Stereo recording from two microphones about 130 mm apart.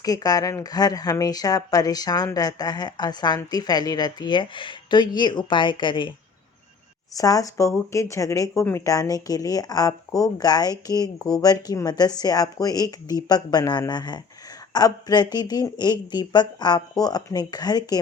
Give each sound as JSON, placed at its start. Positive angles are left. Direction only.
{"t": 0.0, "sound": "speech", "side_deg": 30}
{"t": 7.2, "sound": "speech", "side_deg": 25}